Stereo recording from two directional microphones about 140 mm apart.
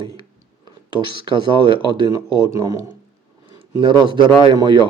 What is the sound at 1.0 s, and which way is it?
Speech, 35° right (ahead or behind).